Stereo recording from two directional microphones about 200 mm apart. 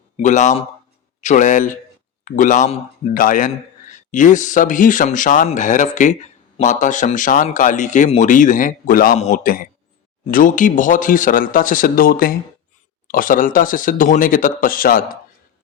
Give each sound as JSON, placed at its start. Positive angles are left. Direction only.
{"t": 0.2, "sound": "speech", "side_deg": 35}